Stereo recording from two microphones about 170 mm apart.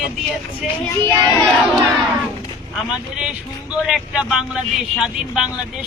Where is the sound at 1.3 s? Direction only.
5° left (ahead or behind).